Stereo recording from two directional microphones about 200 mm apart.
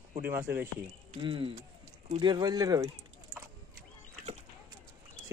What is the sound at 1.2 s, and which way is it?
Speech, 25° right (ahead or behind).